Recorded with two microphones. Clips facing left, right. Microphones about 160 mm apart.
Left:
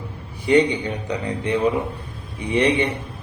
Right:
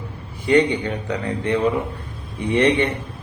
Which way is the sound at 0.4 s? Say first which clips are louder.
Even; 15° left (ahead or behind).